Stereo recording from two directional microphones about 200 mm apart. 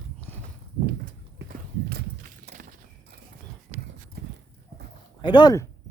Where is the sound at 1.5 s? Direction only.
50° right (ahead or behind).